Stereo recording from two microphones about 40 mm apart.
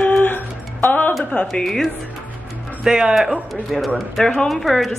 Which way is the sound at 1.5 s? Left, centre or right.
Centre.